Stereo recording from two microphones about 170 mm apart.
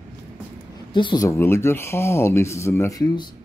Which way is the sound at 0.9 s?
25° left (ahead or behind).